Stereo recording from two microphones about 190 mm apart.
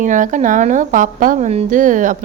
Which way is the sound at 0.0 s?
40° right (ahead or behind).